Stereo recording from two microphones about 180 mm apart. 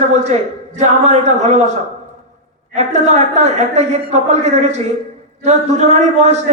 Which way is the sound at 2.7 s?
40° right (ahead or behind).